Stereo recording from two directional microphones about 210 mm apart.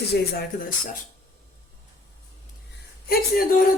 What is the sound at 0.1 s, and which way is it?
Speech, 50° left (ahead or behind).